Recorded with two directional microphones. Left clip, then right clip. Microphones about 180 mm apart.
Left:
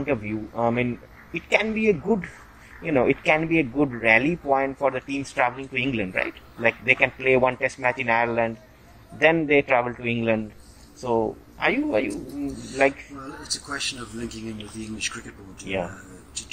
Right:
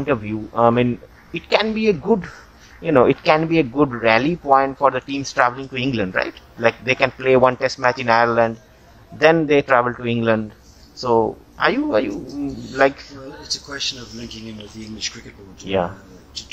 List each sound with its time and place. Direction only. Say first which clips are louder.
0.0 s speech: right 5 dB; 35° right (ahead or behind)
15.6 s speech: right 8 dB; 35° right (ahead or behind)